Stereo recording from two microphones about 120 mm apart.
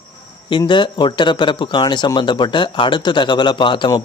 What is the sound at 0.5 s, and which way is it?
A man's voice, 40° left (ahead or behind).